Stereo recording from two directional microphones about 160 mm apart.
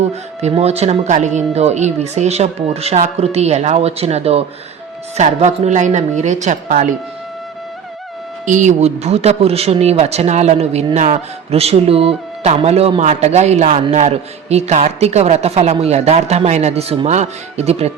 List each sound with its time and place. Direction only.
0.1 s speech: 40° right (ahead or behind)
8.4 s speech: 50° right (ahead or behind)